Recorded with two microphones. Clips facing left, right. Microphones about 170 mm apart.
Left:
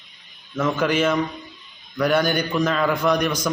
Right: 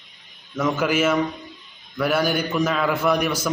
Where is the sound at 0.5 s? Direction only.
10° right (ahead or behind).